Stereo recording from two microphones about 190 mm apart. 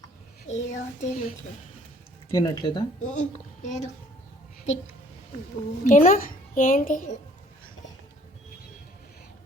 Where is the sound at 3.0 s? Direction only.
40° left (ahead or behind).